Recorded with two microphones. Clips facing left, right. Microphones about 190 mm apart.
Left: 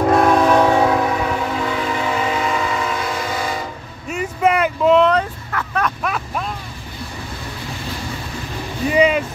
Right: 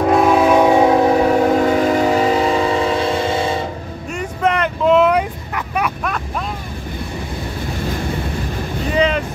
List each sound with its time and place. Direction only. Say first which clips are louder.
0.1 s train: right 2 dB; 5° right (ahead or behind); by 3.6 s 25° right (ahead or behind)
4.1 s vehicle: left 1 dB; 5° left (ahead or behind); by 5.9 s 15° right (ahead or behind)
8.9 s boat: left 2 dB; 10° left (ahead or behind)